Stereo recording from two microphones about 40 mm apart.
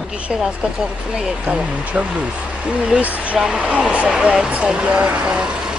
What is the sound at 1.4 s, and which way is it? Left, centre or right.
Speech, right.